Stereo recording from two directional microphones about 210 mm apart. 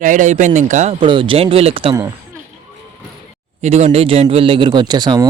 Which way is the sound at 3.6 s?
30° right (ahead or behind).